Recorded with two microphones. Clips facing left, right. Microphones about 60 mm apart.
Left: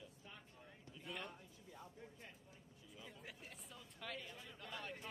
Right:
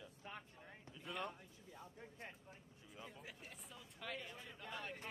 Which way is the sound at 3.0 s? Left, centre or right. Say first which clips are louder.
Left 1 dB; centre.